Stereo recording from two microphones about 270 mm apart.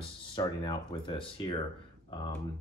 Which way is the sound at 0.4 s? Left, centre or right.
Centre.